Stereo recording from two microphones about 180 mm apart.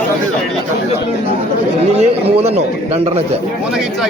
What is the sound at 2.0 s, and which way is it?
Speech, 35° right (ahead or behind).